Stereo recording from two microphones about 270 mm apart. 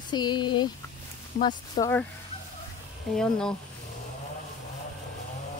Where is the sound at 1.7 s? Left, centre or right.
Centre.